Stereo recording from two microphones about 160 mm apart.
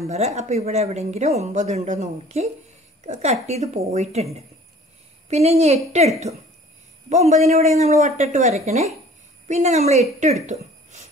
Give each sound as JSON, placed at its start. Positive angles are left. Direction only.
{"t": 0.0, "sound": "a woman's voice", "side_deg": -40}